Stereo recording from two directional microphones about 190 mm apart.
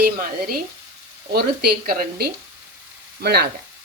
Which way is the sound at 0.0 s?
50° right (ahead or behind).